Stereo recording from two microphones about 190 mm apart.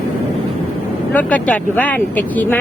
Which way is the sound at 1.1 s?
10° left (ahead or behind).